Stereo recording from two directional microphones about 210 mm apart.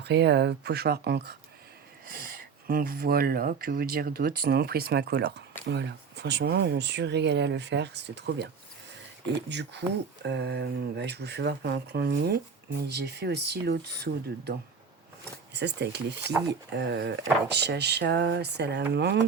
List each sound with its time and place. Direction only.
0.0 s speech: 55° right (ahead or behind)
15.5 s speech: 55° right (ahead or behind)